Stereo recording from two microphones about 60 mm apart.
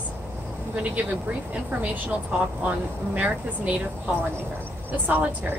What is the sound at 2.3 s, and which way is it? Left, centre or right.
Speech, right.